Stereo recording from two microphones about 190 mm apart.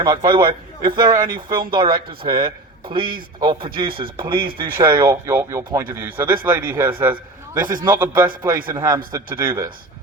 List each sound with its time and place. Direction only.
0.0 s a man's voice: 20° right (ahead or behind)
1.2 s speech: 50° right (ahead or behind)
1.5 s a man's voice: 25° right (ahead or behind)
3.4 s a man's voice: 25° right (ahead or behind)